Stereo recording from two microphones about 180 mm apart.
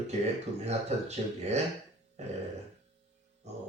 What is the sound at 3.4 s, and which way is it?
Music, 40° right (ahead or behind).